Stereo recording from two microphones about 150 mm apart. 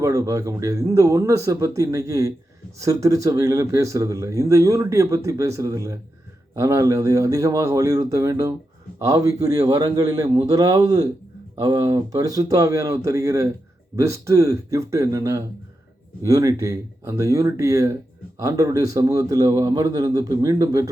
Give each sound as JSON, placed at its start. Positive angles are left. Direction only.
{"t": 0.0, "sound": "speech", "side_deg": -25}